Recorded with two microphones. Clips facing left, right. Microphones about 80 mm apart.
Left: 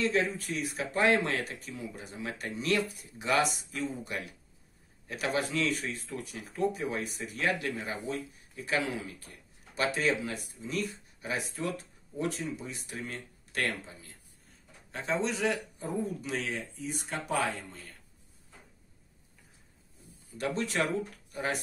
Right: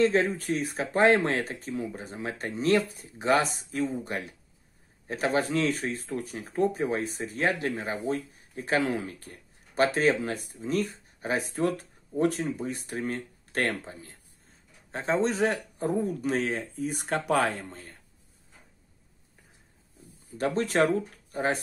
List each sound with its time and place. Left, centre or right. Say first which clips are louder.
0.0 s speech: right 6 dB; right
15.8 s speech: right 6 dB; right
16.3 s speech: right 7 dB; right
20.3 s speech: right 6 dB; right